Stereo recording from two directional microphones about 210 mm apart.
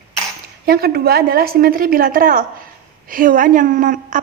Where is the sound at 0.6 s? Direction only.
45° right (ahead or behind).